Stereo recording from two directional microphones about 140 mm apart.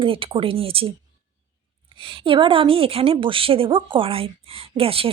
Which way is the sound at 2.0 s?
40° right (ahead or behind).